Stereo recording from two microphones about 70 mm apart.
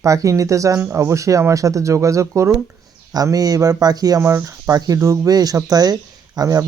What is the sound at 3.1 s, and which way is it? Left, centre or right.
Speech, right.